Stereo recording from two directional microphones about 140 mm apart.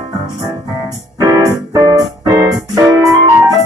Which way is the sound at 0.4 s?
25° right (ahead or behind).